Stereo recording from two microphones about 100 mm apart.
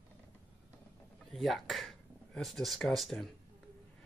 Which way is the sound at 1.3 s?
Centre (ahead or behind).